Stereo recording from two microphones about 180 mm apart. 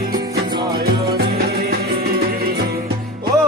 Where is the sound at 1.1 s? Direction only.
60° right (ahead or behind).